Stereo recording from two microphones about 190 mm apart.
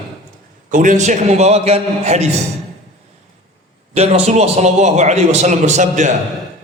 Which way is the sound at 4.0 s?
35° right (ahead or behind).